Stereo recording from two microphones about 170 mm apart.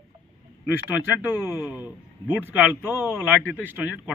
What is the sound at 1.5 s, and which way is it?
Speech, 20° left (ahead or behind).